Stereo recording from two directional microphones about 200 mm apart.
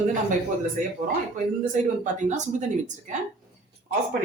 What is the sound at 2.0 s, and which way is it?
Speech, 35° right (ahead or behind).